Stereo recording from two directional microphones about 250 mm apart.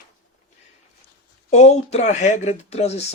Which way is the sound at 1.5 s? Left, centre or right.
Left.